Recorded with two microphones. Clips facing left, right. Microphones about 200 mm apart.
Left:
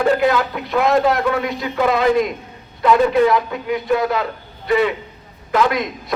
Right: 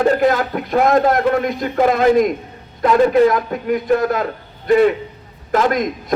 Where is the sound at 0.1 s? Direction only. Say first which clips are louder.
Right 1 dB; 45° right (ahead or behind).